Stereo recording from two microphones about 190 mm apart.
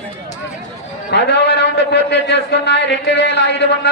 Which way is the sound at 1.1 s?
60° left (ahead or behind).